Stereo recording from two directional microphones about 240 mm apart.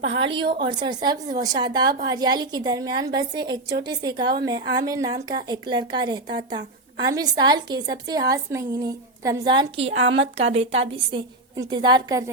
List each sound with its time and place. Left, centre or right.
0.2 s a woman's voice: right